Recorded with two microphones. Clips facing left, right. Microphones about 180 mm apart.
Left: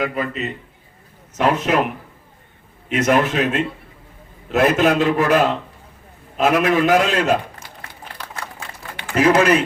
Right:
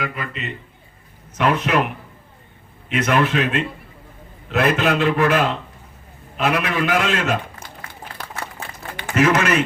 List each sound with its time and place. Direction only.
0.0 s a man's voice: 40° left (ahead or behind)
2.9 s a man's voice: 45° left (ahead or behind)
9.1 s a man's voice: 35° left (ahead or behind)